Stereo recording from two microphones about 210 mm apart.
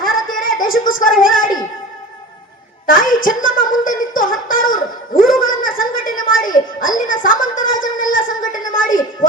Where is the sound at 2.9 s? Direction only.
40° left (ahead or behind).